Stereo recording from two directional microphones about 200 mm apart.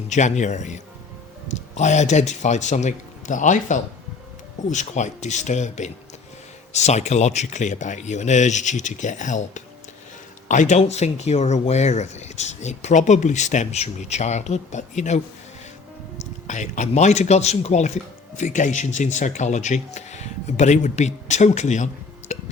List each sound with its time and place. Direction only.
0.1 s speech: 35° left (ahead or behind)
16.5 s speech: 35° left (ahead or behind)
22.3 s music: 35° left (ahead or behind)